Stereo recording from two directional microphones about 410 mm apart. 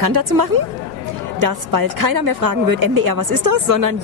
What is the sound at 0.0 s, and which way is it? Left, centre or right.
A woman's voice, right.